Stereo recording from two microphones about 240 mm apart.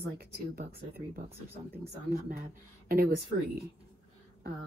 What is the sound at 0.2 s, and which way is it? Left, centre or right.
Speech, right.